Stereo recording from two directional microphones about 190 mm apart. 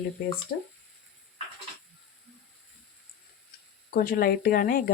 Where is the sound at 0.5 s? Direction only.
60° left (ahead or behind).